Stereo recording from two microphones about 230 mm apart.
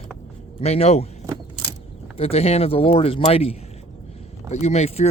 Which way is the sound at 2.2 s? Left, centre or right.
Left.